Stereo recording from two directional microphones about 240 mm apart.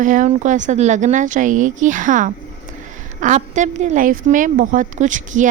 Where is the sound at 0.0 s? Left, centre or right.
Right.